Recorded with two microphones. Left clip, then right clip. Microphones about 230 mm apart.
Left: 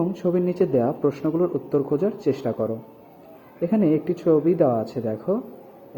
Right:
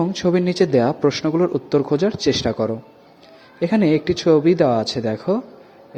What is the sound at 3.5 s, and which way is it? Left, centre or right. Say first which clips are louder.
A man's voice: right 4 dB; right.